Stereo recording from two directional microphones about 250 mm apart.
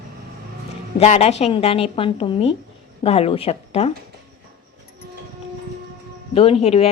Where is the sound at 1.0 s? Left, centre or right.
Left.